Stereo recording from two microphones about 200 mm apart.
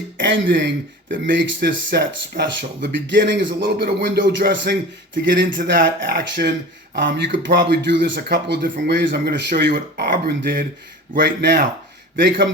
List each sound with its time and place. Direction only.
0.2 s speech: 65° right (ahead or behind)
1.6 s speech: 45° right (ahead or behind); by 6.1 s 60° right (ahead or behind)
6.1 s speech: 45° right (ahead or behind)
6.9 s speech: 65° right (ahead or behind)
8.1 s speech: 50° right (ahead or behind)
8.8 s speech: 60° right (ahead or behind)
10.1 s speech: 50° right (ahead or behind)